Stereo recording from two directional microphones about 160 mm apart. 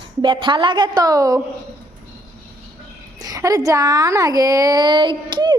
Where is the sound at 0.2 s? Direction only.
30° right (ahead or behind).